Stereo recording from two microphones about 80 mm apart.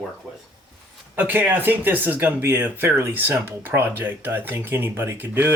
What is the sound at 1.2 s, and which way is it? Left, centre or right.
Speech, right.